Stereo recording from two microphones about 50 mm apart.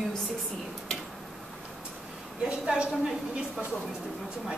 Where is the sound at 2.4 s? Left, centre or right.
Centre.